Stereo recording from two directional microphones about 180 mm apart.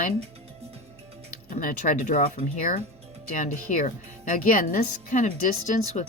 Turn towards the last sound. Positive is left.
turn(degrees=40)  # may be behind; listen again after turning